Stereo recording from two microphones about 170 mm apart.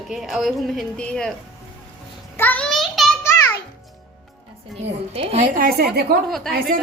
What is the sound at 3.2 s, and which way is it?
Music, 15° left (ahead or behind).